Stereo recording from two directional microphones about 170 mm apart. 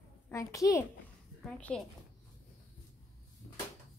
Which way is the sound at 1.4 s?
5° left (ahead or behind).